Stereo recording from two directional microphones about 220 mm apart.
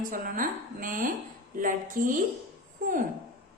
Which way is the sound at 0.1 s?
40° right (ahead or behind).